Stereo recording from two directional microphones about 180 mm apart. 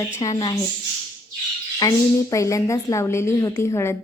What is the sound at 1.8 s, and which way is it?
A woman's voice, 20° left (ahead or behind).